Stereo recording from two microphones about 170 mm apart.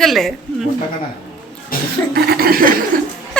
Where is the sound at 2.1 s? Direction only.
60° right (ahead or behind).